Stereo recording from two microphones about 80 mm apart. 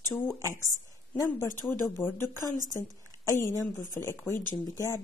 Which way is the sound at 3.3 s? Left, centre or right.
Left.